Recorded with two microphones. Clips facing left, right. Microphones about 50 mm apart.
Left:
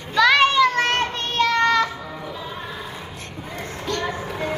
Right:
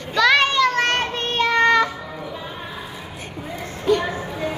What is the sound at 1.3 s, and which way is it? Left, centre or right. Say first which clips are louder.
Child singing: right 2 dB; centre.